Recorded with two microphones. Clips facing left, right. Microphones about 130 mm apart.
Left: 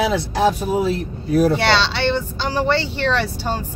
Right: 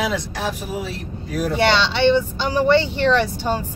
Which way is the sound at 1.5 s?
15° right (ahead or behind).